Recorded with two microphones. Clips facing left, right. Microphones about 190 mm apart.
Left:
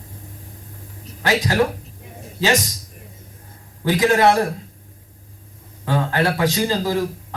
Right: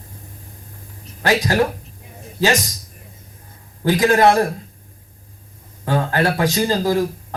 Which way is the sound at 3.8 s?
40° right (ahead or behind).